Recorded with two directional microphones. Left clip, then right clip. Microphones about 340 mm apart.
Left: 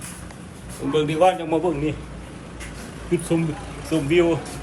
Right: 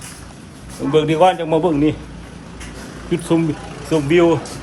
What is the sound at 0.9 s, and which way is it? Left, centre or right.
A man's voice, centre.